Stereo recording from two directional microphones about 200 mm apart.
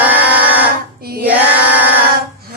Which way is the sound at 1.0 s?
50° right (ahead or behind).